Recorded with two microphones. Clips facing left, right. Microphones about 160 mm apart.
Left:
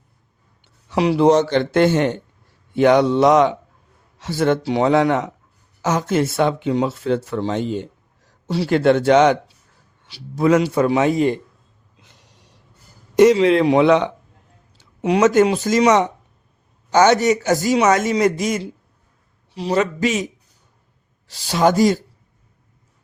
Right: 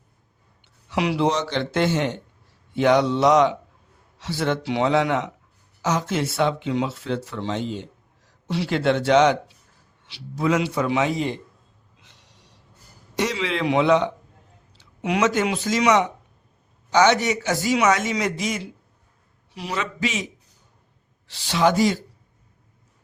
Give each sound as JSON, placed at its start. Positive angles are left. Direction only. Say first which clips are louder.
{"t": 0.9, "sound": "speech", "louder": "left 7 dB", "side_deg": 40}
{"t": 8.4, "sound": "speech", "louder": "left 6 dB", "side_deg": 35}
{"t": 13.1, "sound": "speech", "louder": "left 13 dB", "side_deg": 45}
{"t": 13.8, "sound": "speech", "louder": "left 4 dB", "side_deg": 65}
{"t": 15.0, "sound": "speech", "louder": "left 7 dB", "side_deg": 40}
{"t": 19.5, "sound": "a man's voice", "louder": "left 10 dB", "side_deg": 30}
{"t": 19.8, "sound": "speech", "louder": "left 5 dB", "side_deg": 45}
{"t": 21.2, "sound": "speech", "louder": "left 3 dB", "side_deg": 40}